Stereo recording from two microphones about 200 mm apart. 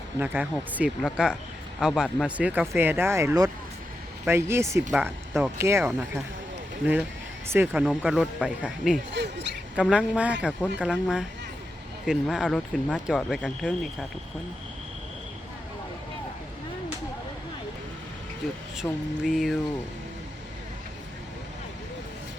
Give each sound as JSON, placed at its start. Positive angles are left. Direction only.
{"t": 0.2, "sound": "speech", "side_deg": -5}
{"t": 7.5, "sound": "speech", "side_deg": -10}
{"t": 9.1, "sound": "speech", "side_deg": -60}
{"t": 9.7, "sound": "speech", "side_deg": -5}
{"t": 18.8, "sound": "speech", "side_deg": 0}